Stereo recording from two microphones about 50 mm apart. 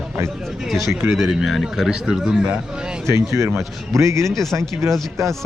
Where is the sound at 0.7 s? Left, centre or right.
Centre.